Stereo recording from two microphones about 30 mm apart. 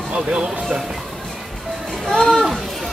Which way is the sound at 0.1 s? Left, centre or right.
Right.